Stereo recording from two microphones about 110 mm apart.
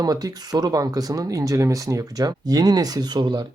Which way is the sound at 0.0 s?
35° right (ahead or behind).